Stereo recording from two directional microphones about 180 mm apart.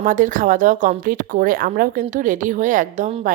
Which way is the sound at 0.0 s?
45° right (ahead or behind).